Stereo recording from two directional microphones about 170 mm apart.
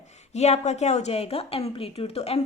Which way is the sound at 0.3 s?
40° left (ahead or behind).